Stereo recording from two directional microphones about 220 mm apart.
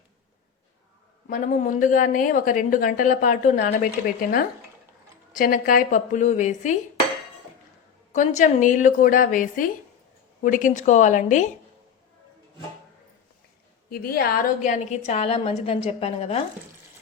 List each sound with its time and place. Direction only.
1.3 s a woman's voice: 35° left (ahead or behind)
8.1 s a woman's voice: 35° left (ahead or behind)
13.9 s a woman's voice: 45° left (ahead or behind); by 16.4 s 30° left (ahead or behind)